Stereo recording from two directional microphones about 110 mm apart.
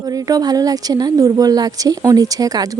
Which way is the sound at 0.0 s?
35° right (ahead or behind).